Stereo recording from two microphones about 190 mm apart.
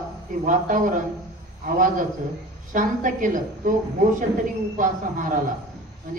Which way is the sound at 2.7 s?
45° right (ahead or behind).